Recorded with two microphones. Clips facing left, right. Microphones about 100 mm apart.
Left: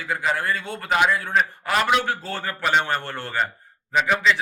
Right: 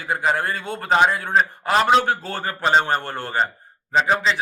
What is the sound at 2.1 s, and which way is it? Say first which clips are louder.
Speech: right 3 dB; 45° right (ahead or behind).